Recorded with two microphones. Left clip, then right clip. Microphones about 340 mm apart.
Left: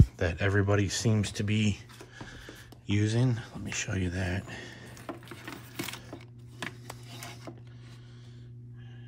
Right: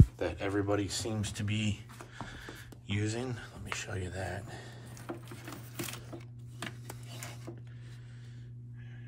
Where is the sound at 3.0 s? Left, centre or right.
Centre.